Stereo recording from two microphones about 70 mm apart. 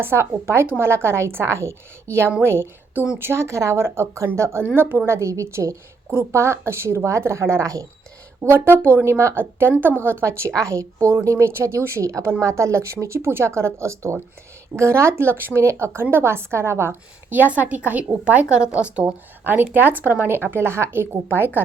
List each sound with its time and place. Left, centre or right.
0.0 s a woman's voice: right
8.4 s a woman's voice: right; by 19.0 s centre
19.5 s a woman's voice: right